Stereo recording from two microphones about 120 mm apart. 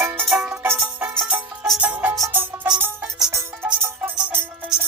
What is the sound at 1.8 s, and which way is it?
Music, 10° right (ahead or behind).